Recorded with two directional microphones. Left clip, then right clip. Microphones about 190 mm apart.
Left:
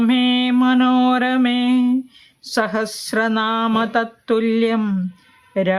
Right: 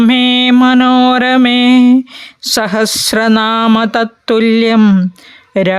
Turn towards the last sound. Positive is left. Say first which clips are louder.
# right 7 dB
turn(degrees=-50)  # may be behind; listen again after turning